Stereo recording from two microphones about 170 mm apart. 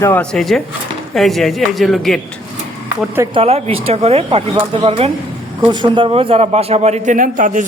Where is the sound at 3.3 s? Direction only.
35° right (ahead or behind).